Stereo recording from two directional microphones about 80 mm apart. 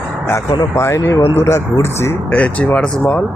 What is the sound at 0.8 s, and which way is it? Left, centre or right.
Speech, left.